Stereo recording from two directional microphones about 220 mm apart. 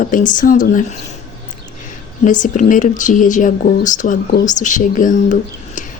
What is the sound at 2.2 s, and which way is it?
A woman's voice, 35° left (ahead or behind).